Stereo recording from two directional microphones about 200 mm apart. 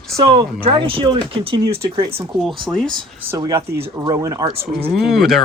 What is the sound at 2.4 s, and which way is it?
Speech, centre (ahead or behind).